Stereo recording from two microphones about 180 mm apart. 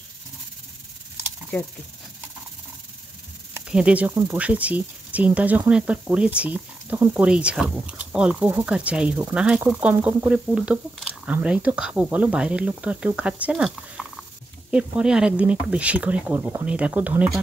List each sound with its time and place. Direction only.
3.5 s speech: 5° right (ahead or behind)
4.1 s speech: 20° right (ahead or behind)
4.4 s speech: 5° right (ahead or behind)